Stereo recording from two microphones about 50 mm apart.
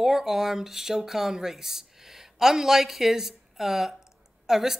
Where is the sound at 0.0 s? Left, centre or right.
Centre.